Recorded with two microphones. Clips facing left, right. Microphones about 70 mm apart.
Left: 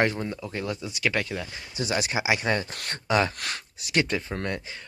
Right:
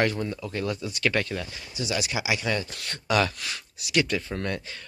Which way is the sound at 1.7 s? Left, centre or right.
Left.